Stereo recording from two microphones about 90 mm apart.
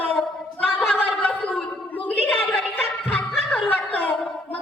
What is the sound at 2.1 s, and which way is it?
Music, 20° left (ahead or behind).